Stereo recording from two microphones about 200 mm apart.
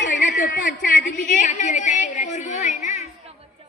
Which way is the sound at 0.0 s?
40° left (ahead or behind).